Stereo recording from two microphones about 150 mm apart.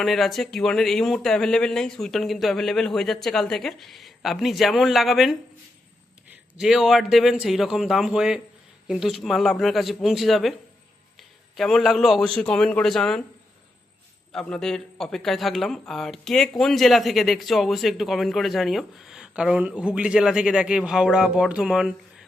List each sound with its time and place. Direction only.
0.0 s speech: centre (ahead or behind)
6.6 s a man's voice: 5° right (ahead or behind)
14.3 s speech: 5° left (ahead or behind)